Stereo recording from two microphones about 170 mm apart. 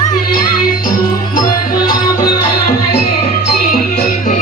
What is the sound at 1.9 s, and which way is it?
Music, 60° left (ahead or behind).